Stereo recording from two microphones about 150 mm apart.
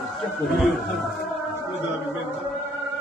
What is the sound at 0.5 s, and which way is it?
Speech, centre (ahead or behind).